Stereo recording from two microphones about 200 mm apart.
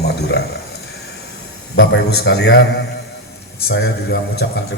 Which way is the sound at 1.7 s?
60° left (ahead or behind).